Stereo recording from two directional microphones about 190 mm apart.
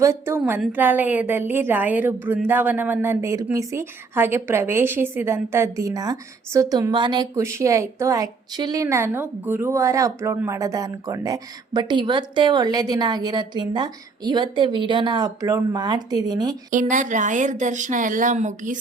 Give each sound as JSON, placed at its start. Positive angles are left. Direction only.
{"t": 0.0, "sound": "a woman's voice", "side_deg": -15}
{"t": 16.7, "sound": "a woman's voice", "side_deg": -40}